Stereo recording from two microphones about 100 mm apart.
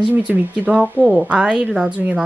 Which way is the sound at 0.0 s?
15° right (ahead or behind).